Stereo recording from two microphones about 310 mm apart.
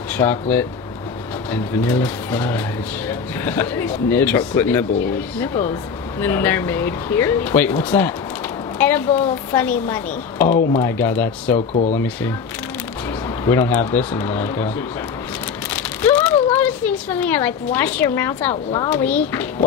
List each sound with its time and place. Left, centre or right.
0.2 s a woman's voice: centre
11.5 s speech: left
13.5 s speech: centre
15.7 s rain on surface: centre
16.5 s a woman's voice: centre
18.9 s a woman's voice: centre